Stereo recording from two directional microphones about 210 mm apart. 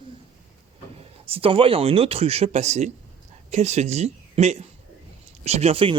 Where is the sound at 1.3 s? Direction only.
25° right (ahead or behind).